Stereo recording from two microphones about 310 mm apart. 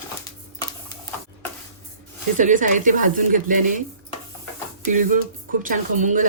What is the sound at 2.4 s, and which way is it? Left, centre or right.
Speech, right.